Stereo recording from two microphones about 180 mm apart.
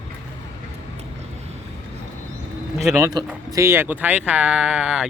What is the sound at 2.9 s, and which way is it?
A man's voice, 15° right (ahead or behind).